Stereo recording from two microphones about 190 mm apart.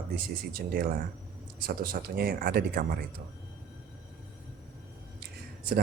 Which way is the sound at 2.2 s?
55° right (ahead or behind).